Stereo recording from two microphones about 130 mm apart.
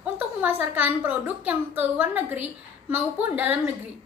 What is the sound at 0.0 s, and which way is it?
A woman's voice, 15° right (ahead or behind).